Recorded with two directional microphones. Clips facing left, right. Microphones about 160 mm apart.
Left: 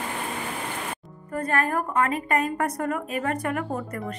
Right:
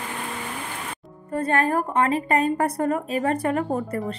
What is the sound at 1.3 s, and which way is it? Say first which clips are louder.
A woman's voice: right 3 dB; 30° right (ahead or behind).